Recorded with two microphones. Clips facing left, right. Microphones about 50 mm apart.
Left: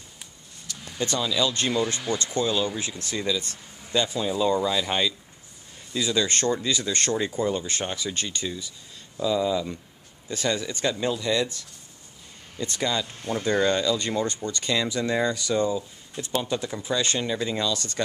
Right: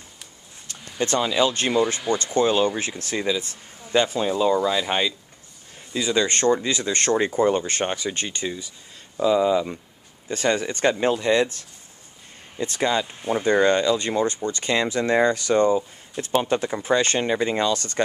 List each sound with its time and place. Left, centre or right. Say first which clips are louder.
0.7 s a sound: left 1 dB; right
1.0 s speech: right 4 dB; right
5.9 s speech: right 3 dB; right
10.3 s speech: right 5 dB; right; by 14.5 s centre
14.5 s speech: right 3 dB; right